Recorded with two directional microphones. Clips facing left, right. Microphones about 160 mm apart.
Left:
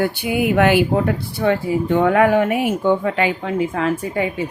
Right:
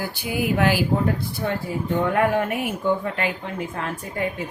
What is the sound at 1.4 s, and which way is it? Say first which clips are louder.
Speech: left 11 dB; 90° left.